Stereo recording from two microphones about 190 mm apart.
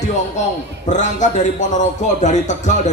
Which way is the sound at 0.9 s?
40° left (ahead or behind).